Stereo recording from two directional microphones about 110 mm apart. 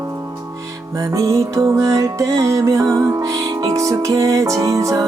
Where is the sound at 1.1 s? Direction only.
30° right (ahead or behind).